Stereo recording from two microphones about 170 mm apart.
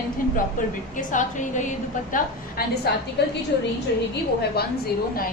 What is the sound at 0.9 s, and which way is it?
Speech, 50° left (ahead or behind).